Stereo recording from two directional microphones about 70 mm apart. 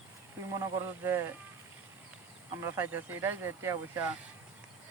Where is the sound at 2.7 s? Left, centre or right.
Right.